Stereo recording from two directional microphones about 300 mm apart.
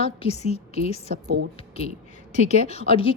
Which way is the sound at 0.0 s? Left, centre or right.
Centre.